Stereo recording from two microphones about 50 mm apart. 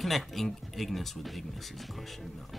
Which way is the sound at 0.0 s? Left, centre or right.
Centre.